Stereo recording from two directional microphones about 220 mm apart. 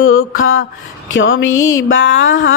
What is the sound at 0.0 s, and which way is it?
Mantra, 65° left (ahead or behind).